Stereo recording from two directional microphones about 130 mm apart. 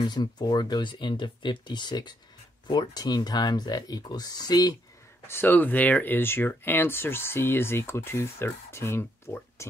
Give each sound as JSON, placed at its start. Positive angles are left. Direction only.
{"t": 0.0, "sound": "speech", "side_deg": 35}
{"t": 5.3, "sound": "speech", "side_deg": 15}